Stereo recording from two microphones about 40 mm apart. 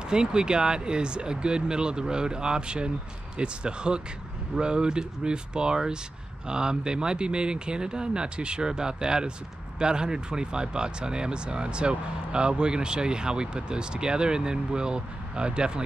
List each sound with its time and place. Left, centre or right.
0.1 s speech: right